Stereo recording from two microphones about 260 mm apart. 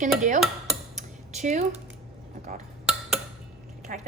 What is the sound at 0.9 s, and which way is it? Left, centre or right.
Cutlery, right.